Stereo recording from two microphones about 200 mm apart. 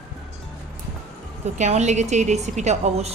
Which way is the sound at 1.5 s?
35° right (ahead or behind).